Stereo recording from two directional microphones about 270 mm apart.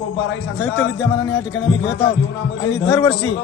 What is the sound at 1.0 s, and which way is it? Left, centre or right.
Speech, centre.